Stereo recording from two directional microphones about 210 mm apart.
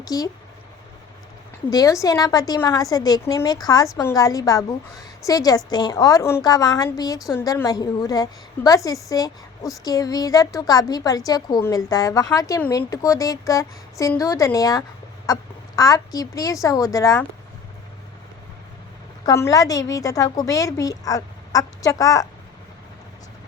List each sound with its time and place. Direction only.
0.1 s a woman's voice: 15° left (ahead or behind)
1.7 s a woman's voice: 15° left (ahead or behind)
19.2 s a woman's voice: 15° left (ahead or behind)